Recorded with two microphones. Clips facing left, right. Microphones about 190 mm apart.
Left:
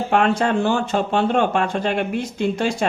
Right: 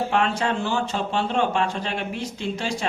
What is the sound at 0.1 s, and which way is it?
Speech, 50° left (ahead or behind).